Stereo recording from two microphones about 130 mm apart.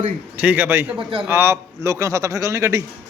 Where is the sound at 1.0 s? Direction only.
45° right (ahead or behind).